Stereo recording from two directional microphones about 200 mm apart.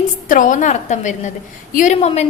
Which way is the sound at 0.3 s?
40° left (ahead or behind).